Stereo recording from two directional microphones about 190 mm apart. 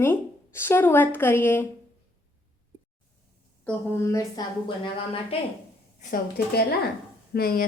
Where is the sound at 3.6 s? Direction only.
10° left (ahead or behind).